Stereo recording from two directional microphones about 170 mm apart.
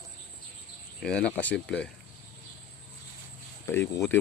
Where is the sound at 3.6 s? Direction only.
15° left (ahead or behind).